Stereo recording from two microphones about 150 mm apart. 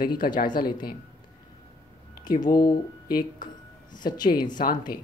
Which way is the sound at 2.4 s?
25° left (ahead or behind).